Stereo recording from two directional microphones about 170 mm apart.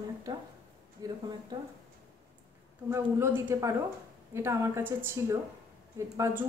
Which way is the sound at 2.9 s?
15° right (ahead or behind).